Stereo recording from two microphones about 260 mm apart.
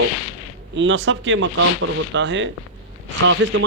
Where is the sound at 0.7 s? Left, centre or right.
Right.